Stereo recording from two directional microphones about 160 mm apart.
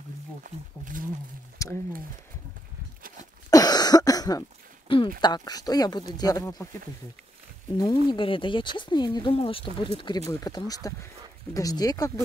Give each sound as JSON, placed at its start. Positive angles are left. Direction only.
{"t": 0.4, "sound": "speech", "side_deg": -60}
{"t": 1.6, "sound": "a sound", "side_deg": 20}
{"t": 3.4, "sound": "cough", "side_deg": 25}
{"t": 5.2, "sound": "speech", "side_deg": 25}
{"t": 7.7, "sound": "speech", "side_deg": 25}